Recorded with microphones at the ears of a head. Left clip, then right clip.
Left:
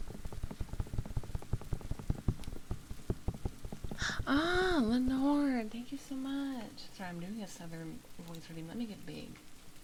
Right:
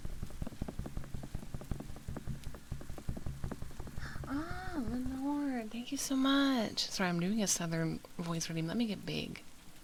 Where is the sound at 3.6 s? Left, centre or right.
Left.